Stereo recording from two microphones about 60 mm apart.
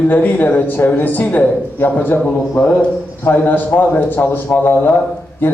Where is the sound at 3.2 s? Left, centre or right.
Left.